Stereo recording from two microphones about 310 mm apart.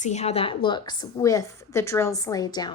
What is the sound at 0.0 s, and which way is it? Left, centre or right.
A woman's voice, left.